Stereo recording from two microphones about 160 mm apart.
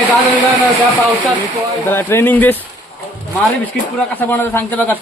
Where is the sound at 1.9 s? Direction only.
15° left (ahead or behind).